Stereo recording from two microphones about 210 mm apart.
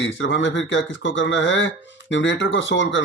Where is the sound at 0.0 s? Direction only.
60° left (ahead or behind).